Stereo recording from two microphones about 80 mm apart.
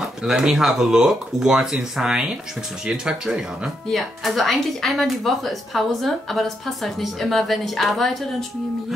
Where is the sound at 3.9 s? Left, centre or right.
Centre.